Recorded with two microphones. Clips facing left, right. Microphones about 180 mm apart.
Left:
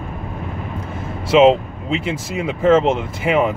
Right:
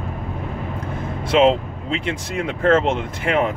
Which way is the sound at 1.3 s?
5° left (ahead or behind).